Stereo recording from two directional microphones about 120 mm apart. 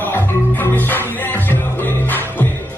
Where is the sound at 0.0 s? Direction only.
15° left (ahead or behind).